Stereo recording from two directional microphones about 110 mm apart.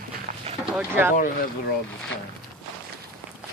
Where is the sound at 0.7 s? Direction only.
20° right (ahead or behind).